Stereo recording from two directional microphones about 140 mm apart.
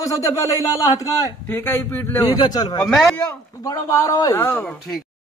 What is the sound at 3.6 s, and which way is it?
A man's voice, 25° left (ahead or behind).